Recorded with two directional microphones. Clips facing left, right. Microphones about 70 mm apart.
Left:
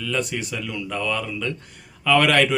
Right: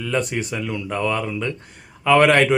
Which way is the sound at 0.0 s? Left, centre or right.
Right.